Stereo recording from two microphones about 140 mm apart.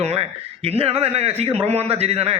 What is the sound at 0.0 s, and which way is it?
A man's voice, 45° right (ahead or behind).